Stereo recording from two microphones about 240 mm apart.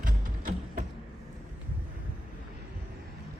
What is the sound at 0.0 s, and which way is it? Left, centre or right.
Music, right.